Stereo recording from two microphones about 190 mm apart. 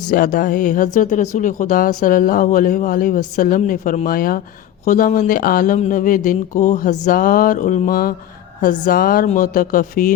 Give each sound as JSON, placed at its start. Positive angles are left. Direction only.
{"t": 0.1, "sound": "speech", "side_deg": 45}